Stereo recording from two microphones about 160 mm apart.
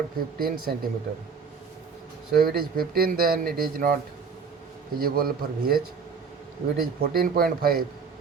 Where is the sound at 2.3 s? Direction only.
70° right (ahead or behind).